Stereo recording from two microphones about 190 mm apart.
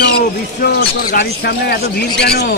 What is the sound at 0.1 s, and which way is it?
Speech, 60° left (ahead or behind).